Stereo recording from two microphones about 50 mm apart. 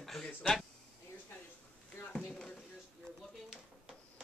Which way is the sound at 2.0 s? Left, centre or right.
Left.